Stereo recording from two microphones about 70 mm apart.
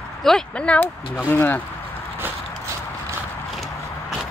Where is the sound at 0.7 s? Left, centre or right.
Centre.